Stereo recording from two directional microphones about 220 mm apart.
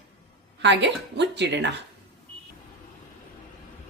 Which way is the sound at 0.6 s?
50° right (ahead or behind).